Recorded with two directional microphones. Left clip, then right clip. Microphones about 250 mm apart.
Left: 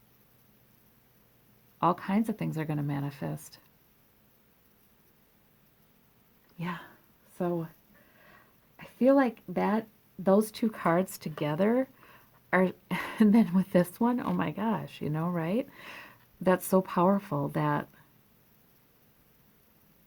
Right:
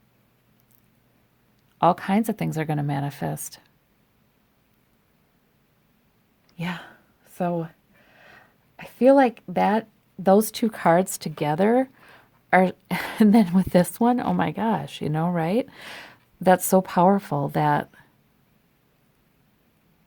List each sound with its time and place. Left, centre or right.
1.8 s speech: right
6.6 s speech: right
8.2 s a sound: right
10.2 s speech: right